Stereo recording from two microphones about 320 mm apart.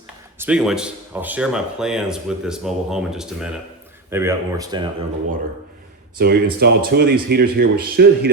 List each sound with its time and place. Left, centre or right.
0.3 s speech: centre
6.1 s speech: right